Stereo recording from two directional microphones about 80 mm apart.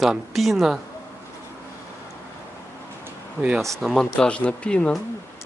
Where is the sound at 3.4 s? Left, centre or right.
Right.